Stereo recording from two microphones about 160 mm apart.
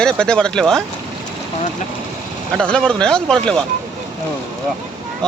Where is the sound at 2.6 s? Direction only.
5° left (ahead or behind).